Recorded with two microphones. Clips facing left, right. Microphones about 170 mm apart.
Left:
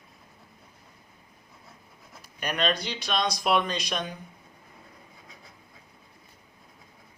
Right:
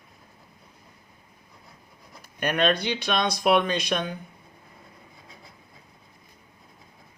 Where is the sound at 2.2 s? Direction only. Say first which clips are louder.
Right 5 dB; 55° right (ahead or behind).